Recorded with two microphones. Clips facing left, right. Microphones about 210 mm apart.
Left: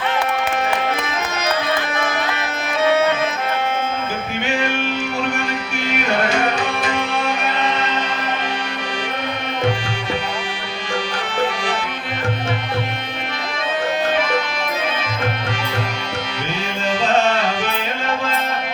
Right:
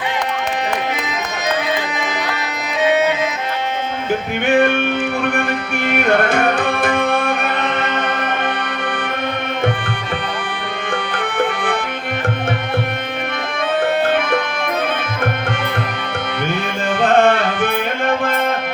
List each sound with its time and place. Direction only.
2.8 s music: 15° right (ahead or behind)
4.4 s music: 55° right (ahead or behind)
5.2 s tabla: 55° right (ahead or behind)
10.9 s accordion: 55° right (ahead or behind)
14.1 s music: 55° right (ahead or behind)
16.9 s music: 55° right (ahead or behind)